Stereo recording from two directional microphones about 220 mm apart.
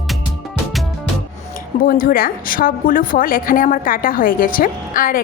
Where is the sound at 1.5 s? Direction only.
40° left (ahead or behind).